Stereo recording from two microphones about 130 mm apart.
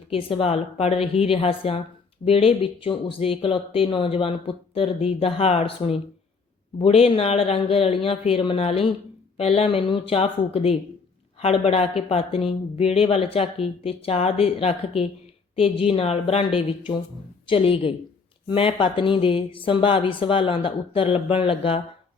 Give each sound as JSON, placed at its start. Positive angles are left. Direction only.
{"t": 0.1, "sound": "speech", "side_deg": 45}